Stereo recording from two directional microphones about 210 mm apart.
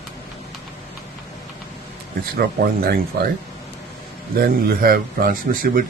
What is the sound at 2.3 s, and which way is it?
Speech, 45° right (ahead or behind).